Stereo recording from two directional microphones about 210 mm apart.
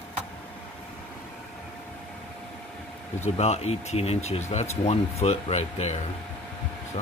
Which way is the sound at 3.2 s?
30° left (ahead or behind).